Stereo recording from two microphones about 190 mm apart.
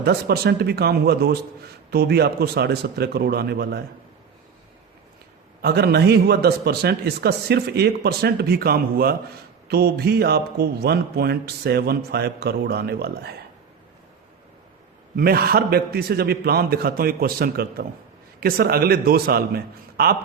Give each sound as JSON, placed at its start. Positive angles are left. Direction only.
{"t": 0.0, "sound": "speech", "side_deg": -60}
{"t": 5.6, "sound": "speech", "side_deg": -55}
{"t": 15.1, "sound": "a man's voice", "side_deg": -50}